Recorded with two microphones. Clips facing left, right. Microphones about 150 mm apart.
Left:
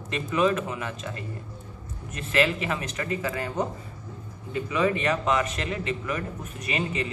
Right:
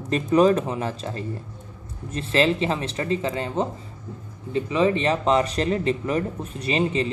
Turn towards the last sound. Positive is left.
turn(degrees=-30)  # may be behind; listen again after turning